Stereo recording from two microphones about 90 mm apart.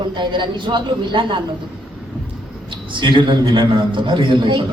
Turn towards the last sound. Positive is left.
turn(degrees=-65)  # may be behind; listen again after turning